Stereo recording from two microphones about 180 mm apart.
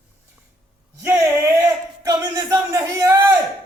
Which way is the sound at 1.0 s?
15° right (ahead or behind).